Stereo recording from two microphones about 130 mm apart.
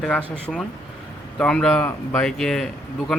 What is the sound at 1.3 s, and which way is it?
Speech, 5° left (ahead or behind).